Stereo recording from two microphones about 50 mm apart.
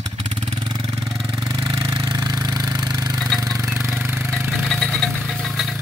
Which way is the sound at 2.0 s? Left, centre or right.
Right.